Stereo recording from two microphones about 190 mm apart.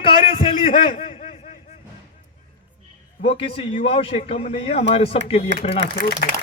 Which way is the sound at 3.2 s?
30° left (ahead or behind).